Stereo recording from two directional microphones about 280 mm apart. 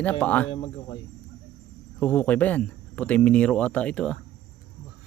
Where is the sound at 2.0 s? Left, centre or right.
Centre.